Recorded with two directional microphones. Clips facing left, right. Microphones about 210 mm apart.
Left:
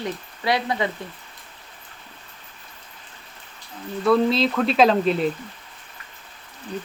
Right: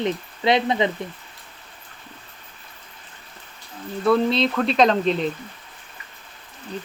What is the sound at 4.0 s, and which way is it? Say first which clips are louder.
Speech: even; centre (ahead or behind).